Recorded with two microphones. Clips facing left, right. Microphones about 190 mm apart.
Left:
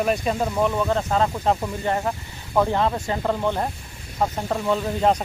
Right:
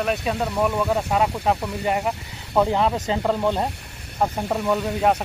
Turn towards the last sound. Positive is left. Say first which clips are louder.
# even
turn(degrees=-5)  # may be behind; listen again after turning